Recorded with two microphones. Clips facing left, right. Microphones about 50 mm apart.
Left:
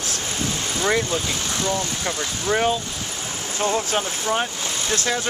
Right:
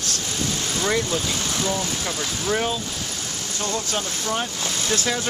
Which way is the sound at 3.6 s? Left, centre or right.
Left.